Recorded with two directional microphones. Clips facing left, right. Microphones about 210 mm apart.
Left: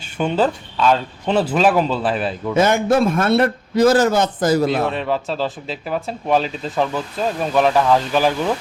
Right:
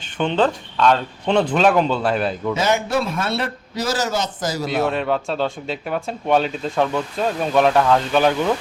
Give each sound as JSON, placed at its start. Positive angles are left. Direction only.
{"t": 0.2, "sound": "speech", "side_deg": 10}
{"t": 2.6, "sound": "a man's voice", "side_deg": 50}
{"t": 4.8, "sound": "speech", "side_deg": 0}